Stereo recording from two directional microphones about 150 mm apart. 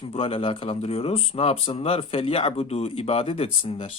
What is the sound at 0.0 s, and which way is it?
Speech, 40° left (ahead or behind).